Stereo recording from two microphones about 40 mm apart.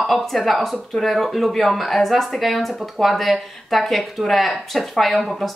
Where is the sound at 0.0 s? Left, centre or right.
Centre.